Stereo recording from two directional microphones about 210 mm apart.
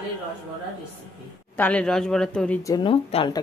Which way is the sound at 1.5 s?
5° left (ahead or behind).